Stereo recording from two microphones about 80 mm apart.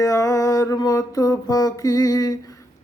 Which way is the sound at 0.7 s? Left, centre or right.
Left.